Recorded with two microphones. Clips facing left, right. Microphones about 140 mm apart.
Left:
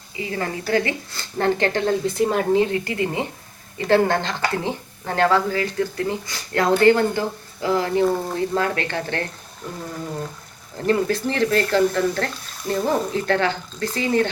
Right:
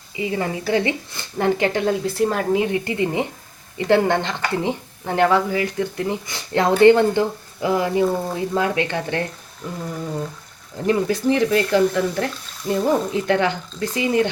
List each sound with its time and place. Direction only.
0.2 s a woman's voice: 20° right (ahead or behind); by 2.6 s centre (ahead or behind)
2.6 s a woman's voice: 15° right (ahead or behind)
10.8 s a woman's voice: 10° right (ahead or behind)